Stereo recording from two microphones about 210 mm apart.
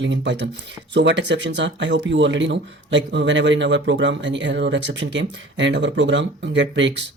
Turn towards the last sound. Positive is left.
turn(degrees=-60)  # may be behind; listen again after turning